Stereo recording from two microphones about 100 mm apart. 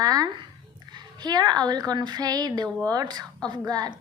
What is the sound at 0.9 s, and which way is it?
A woman's voice, 45° right (ahead or behind).